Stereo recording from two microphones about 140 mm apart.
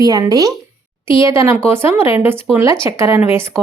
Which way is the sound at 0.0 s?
25° right (ahead or behind).